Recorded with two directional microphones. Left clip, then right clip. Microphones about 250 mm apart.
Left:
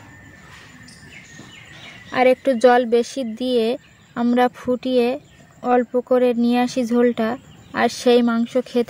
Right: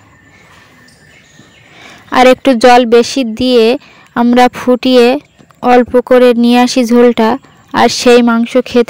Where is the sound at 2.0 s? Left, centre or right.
Right.